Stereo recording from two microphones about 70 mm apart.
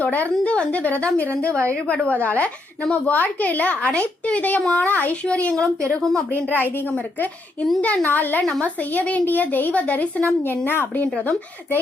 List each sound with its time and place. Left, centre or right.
0.0 s a woman's voice: left; by 6.2 s centre
6.4 s a woman's voice: left